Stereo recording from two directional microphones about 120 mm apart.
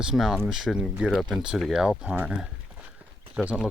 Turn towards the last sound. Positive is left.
turn(degrees=-10)  # may be behind; listen again after turning